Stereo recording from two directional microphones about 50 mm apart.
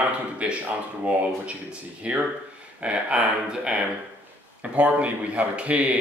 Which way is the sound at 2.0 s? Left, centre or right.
Right.